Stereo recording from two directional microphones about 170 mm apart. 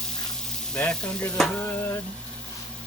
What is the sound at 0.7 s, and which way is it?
Sizzle, 5° left (ahead or behind).